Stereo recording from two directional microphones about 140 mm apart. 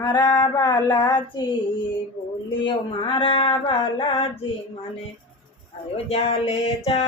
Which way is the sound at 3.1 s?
40° left (ahead or behind).